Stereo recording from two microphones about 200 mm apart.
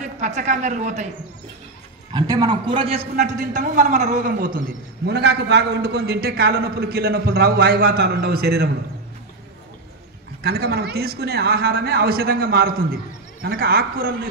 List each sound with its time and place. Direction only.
0.0 s speech: 35° right (ahead or behind)
2.1 s a man's voice: 20° right (ahead or behind); by 4.5 s 40° right (ahead or behind)
4.6 s a man's voice: 55° right (ahead or behind)
10.4 s a man's voice: 50° right (ahead or behind)